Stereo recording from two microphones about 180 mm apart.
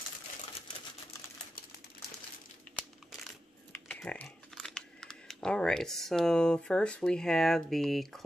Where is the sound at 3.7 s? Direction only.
5° left (ahead or behind).